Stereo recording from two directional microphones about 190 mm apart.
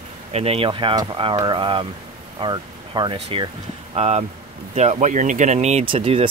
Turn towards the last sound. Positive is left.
turn(degrees=-30)  # may be behind; listen again after turning